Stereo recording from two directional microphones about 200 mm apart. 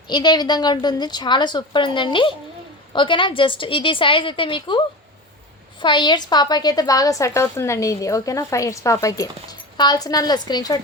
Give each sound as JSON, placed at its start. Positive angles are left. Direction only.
{"t": 0.1, "sound": "a woman's voice", "side_deg": 20}
{"t": 5.8, "sound": "a woman's voice", "side_deg": 25}